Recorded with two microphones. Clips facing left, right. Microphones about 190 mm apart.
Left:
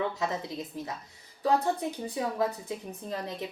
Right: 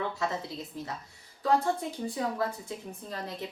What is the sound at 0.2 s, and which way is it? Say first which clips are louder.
A woman's voice: left 1 dB; 20° left (ahead or behind).